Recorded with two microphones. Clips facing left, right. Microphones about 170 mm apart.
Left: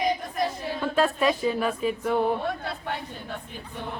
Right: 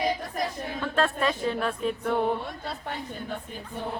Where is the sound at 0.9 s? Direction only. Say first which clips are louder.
Left 3 dB; 10° left (ahead or behind).